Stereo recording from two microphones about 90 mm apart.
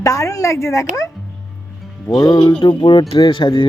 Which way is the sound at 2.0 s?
45° left (ahead or behind).